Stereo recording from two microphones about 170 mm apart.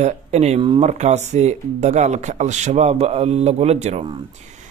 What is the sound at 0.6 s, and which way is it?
Speech, 30° right (ahead or behind).